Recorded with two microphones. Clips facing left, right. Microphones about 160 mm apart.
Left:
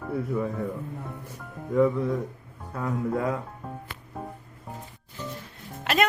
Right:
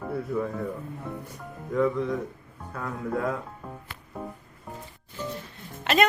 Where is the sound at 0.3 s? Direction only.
Centre (ahead or behind).